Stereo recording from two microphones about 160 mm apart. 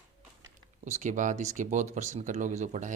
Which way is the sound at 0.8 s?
50° right (ahead or behind).